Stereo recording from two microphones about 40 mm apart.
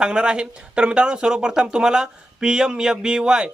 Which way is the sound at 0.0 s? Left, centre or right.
Right.